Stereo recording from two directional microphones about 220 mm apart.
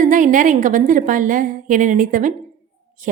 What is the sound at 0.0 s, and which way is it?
A woman's voice, 35° right (ahead or behind).